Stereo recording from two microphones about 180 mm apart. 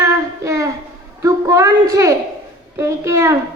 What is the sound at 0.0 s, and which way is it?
Child singing, 15° right (ahead or behind).